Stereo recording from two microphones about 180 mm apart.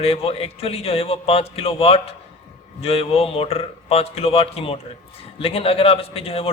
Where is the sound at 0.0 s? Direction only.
30° left (ahead or behind).